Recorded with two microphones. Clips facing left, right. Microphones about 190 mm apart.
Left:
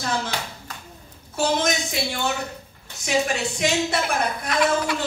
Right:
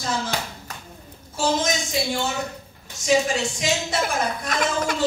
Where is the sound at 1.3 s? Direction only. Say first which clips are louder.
Even; 60° left (ahead or behind).